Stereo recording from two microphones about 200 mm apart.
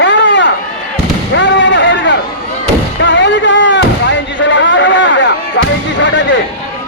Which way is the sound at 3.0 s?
65° left (ahead or behind).